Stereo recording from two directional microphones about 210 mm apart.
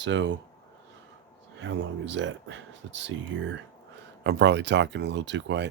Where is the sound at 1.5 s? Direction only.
65° right (ahead or behind).